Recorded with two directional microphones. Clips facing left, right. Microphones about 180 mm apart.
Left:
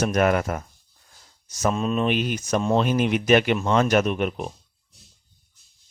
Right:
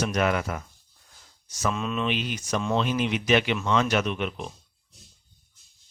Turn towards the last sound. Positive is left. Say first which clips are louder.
# left 5 dB
turn(degrees=45)  # may be behind; listen again after turning